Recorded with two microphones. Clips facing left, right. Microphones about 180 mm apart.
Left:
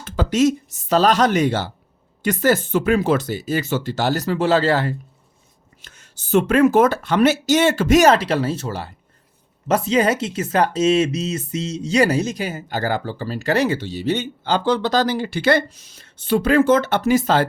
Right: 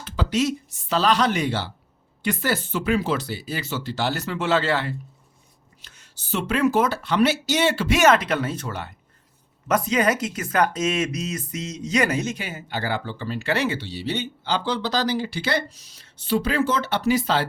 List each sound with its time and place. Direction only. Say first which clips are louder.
0.0 s speech: left 6 dB; 45° left (ahead or behind)